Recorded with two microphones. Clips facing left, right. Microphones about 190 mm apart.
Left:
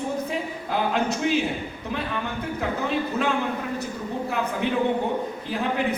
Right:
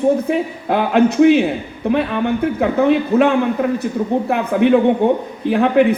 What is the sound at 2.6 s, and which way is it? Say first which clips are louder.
Speech: right 10 dB; 65° right (ahead or behind).